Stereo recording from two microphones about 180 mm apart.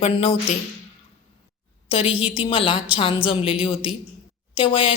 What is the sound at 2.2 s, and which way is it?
A woman's voice, 30° left (ahead or behind).